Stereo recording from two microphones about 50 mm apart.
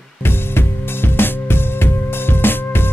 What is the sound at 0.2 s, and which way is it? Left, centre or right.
Music, left.